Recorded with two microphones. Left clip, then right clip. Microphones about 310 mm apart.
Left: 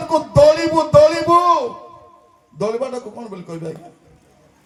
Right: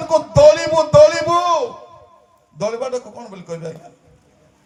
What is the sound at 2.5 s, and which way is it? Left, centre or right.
A man's voice, left.